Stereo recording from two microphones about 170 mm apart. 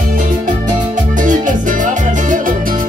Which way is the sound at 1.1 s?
50° right (ahead or behind).